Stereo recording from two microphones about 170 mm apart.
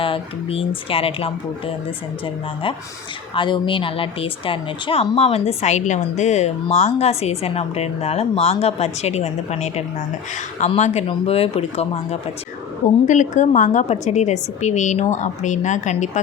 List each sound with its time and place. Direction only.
0.0 s speech: 30° left (ahead or behind)
13.1 s speech: 45° left (ahead or behind)